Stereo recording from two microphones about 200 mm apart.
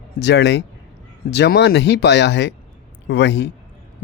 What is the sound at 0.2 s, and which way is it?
A man's voice, 60° left (ahead or behind).